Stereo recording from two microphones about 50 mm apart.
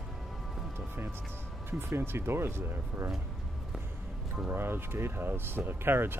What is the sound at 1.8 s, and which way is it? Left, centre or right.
Speech, right.